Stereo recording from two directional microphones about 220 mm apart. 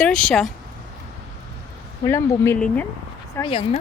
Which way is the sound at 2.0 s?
10° left (ahead or behind).